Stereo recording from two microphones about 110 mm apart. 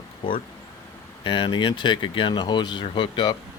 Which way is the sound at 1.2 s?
45° left (ahead or behind).